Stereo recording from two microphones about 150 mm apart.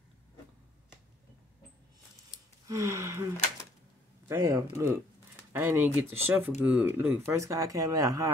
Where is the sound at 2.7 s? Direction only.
20° right (ahead or behind).